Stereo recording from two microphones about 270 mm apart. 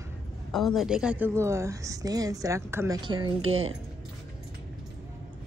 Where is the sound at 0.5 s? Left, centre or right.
Centre.